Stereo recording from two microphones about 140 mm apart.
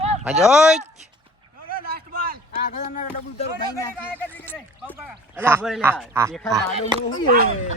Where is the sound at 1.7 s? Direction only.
90° right.